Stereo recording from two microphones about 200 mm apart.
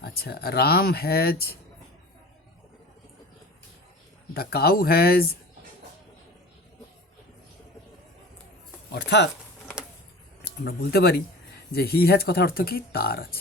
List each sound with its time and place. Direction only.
0.0 s speech: 50° left (ahead or behind)
4.4 s speech: 50° left (ahead or behind)
8.9 s speech: 60° left (ahead or behind)
10.6 s speech: 50° left (ahead or behind)